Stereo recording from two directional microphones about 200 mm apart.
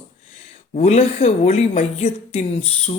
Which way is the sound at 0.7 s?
35° left (ahead or behind).